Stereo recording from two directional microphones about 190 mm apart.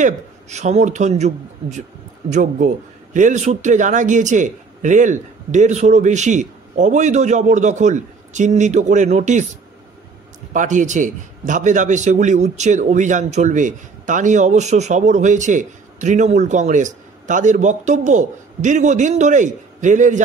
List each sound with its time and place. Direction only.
0.0 s a man's voice: 35° right (ahead or behind)
10.5 s a man's voice: 40° right (ahead or behind)